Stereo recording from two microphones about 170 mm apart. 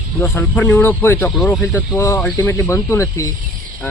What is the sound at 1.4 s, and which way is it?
Speech, centre (ahead or behind).